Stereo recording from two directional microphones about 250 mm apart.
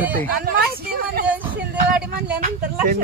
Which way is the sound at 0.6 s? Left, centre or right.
Right.